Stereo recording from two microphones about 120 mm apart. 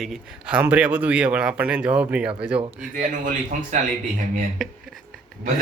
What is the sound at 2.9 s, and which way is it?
Speech, 90° right.